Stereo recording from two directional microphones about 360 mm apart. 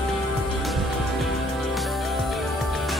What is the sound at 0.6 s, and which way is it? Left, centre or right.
Music, centre.